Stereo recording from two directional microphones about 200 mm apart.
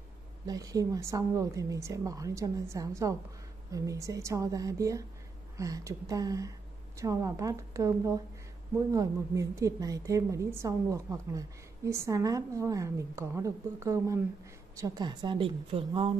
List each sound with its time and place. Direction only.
0.5 s a woman's voice: 15° right (ahead or behind)